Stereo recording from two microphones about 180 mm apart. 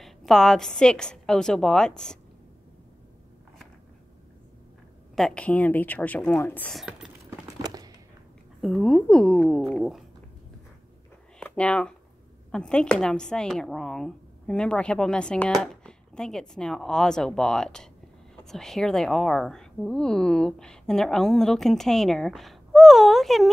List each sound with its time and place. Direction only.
0.0 s a woman's voice: centre (ahead or behind)
5.1 s speech: 5° left (ahead or behind)
6.8 s speech: 5° right (ahead or behind)
7.2 s crumpling: 20° right (ahead or behind)
8.5 s a woman's voice: centre (ahead or behind)
11.3 s a sound: 5° left (ahead or behind)
12.4 s a woman's voice: 5° left (ahead or behind)